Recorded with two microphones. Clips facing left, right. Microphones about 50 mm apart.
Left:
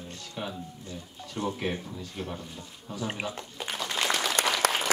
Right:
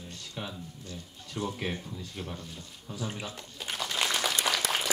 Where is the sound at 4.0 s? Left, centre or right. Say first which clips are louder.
Left 2 dB; centre.